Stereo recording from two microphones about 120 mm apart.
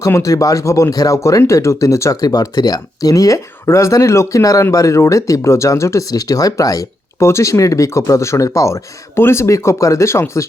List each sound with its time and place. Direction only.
0.0 s speech: 25° left (ahead or behind)